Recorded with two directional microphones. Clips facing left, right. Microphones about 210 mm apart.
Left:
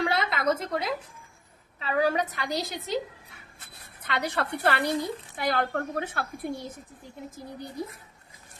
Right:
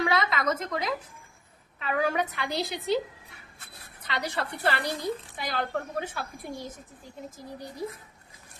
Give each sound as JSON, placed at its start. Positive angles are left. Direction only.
{"t": 0.1, "sound": "a woman's voice", "side_deg": 30}
{"t": 4.0, "sound": "a woman's voice", "side_deg": 55}